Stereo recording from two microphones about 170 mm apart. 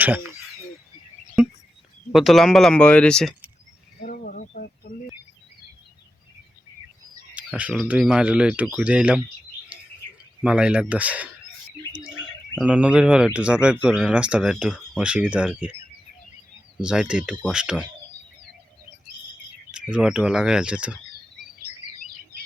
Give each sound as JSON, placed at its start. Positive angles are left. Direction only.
{"t": 2.1, "sound": "speech", "side_deg": 0}
{"t": 4.0, "sound": "a sound", "side_deg": 55}
{"t": 7.3, "sound": "speech", "side_deg": -10}
{"t": 9.7, "sound": "bird", "side_deg": -10}
{"t": 10.4, "sound": "speech", "side_deg": -5}
{"t": 16.8, "sound": "speech", "side_deg": -5}
{"t": 19.7, "sound": "speech", "side_deg": -5}